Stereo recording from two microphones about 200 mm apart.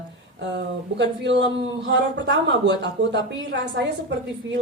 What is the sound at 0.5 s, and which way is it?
A woman's voice, 60° right (ahead or behind).